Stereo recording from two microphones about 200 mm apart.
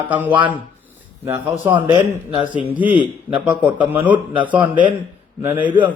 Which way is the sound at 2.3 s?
25° right (ahead or behind).